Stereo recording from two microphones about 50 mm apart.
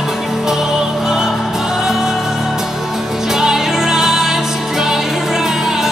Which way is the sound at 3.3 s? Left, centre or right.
Centre.